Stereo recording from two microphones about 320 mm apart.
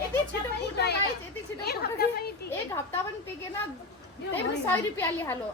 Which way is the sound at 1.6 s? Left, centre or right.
Left.